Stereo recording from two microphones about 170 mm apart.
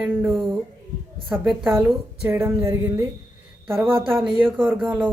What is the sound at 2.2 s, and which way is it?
Speech, 15° right (ahead or behind).